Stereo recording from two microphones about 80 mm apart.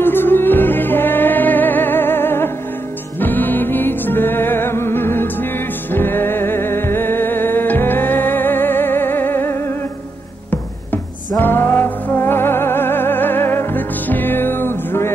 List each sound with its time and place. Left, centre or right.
0.0 s music: left